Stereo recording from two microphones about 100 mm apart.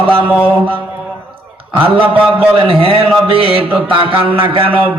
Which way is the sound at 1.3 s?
65° right (ahead or behind).